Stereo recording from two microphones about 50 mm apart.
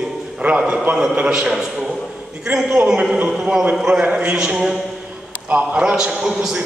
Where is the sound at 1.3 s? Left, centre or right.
Centre.